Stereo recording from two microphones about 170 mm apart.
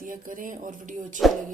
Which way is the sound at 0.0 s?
50° right (ahead or behind).